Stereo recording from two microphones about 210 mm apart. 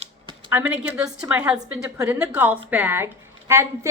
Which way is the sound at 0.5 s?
5° right (ahead or behind).